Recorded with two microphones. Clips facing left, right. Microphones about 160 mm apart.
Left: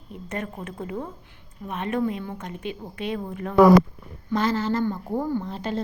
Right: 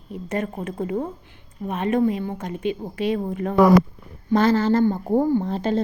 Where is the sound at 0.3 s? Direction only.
35° right (ahead or behind).